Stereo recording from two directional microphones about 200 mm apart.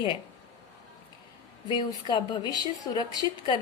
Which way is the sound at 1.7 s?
25° left (ahead or behind).